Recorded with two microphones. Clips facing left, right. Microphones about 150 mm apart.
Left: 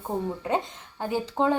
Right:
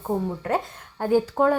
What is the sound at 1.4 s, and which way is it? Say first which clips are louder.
Speech: right 1 dB; 5° right (ahead or behind).